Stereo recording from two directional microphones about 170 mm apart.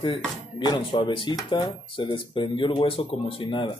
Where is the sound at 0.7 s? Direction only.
25° left (ahead or behind).